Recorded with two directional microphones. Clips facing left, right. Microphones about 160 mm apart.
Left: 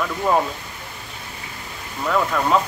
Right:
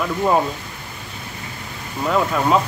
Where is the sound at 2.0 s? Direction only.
15° right (ahead or behind).